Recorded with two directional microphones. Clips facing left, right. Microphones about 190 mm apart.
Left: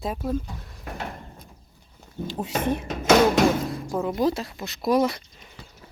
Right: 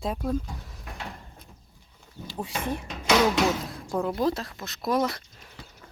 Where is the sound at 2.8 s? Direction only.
45° left (ahead or behind).